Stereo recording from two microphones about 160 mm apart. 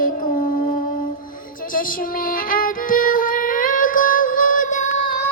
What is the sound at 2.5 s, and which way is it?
Music, 60° left (ahead or behind).